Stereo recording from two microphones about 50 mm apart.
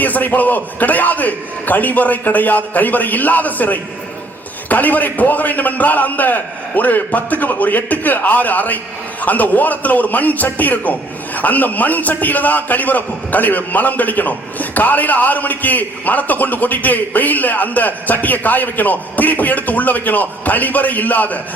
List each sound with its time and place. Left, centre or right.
0.0 s a man's voice: left